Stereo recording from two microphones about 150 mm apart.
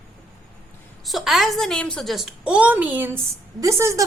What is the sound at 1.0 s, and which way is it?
A woman's voice, centre (ahead or behind).